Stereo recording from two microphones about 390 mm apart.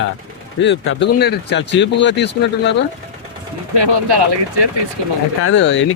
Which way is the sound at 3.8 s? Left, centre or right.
Right.